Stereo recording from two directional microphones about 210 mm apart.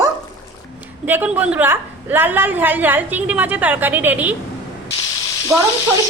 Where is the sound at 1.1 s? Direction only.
10° right (ahead or behind).